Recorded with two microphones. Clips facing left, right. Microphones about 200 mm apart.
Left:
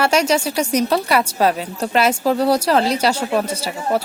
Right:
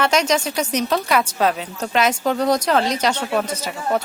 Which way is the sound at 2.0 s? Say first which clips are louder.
Left 2 dB; 10° left (ahead or behind).